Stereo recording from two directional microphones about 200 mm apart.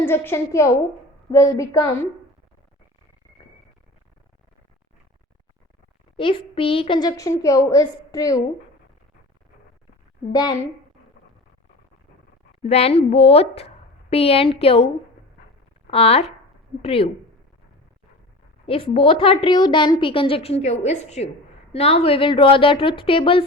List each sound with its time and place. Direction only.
0.0 s a woman's voice: 10° left (ahead or behind)
6.1 s a woman's voice: 25° left (ahead or behind)
10.3 s a woman's voice: 20° left (ahead or behind)
12.6 s a woman's voice: 30° left (ahead or behind)
15.9 s a woman's voice: 30° left (ahead or behind)
18.6 s a woman's voice: 25° left (ahead or behind)